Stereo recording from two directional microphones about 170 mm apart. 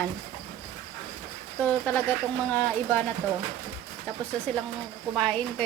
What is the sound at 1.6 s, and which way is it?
Speech, 10° left (ahead or behind).